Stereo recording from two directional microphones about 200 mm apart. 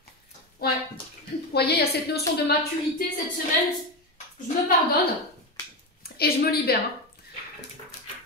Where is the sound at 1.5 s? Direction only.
55° left (ahead or behind).